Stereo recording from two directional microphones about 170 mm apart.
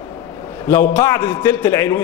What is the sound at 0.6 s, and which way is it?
A man's voice, 15° left (ahead or behind).